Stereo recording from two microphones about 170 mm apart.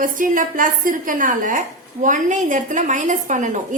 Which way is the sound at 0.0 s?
50° right (ahead or behind).